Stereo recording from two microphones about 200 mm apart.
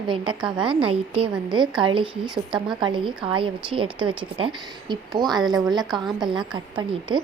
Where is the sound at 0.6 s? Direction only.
25° right (ahead or behind).